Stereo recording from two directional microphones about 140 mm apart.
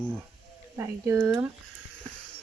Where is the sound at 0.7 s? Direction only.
20° right (ahead or behind).